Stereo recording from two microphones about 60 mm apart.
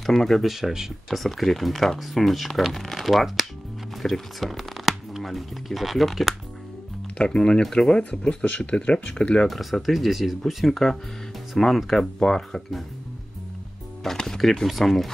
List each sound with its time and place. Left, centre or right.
0.0 s speech: centre
7.2 s speech: centre
9.5 s speech: centre
14.0 s speech: centre